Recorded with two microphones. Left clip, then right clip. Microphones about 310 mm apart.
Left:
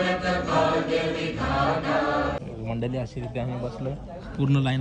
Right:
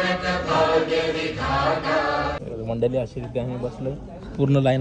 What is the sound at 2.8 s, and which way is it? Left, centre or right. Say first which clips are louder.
Speech: right 10 dB; centre.